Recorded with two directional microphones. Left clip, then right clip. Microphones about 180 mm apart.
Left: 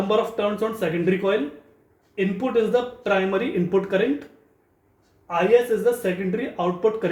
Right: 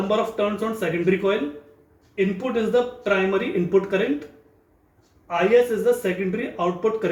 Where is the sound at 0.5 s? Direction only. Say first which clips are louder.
Left 1 dB; 35° left (ahead or behind).